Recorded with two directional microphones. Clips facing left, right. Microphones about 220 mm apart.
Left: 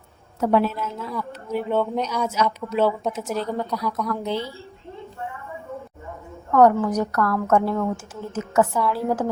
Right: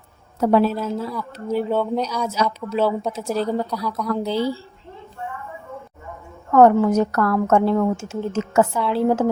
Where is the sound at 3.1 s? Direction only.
35° right (ahead or behind).